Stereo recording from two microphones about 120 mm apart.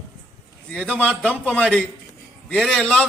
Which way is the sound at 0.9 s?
10° left (ahead or behind).